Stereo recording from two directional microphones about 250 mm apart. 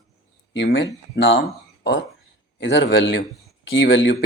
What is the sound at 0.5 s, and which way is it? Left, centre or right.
Speech, left.